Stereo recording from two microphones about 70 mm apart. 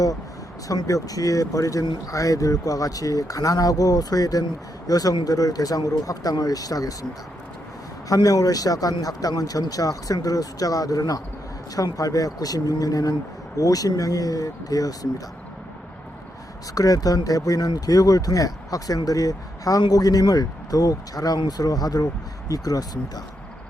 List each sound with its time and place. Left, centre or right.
0.7 s speech: left
8.1 s speech: left
16.7 s speech: left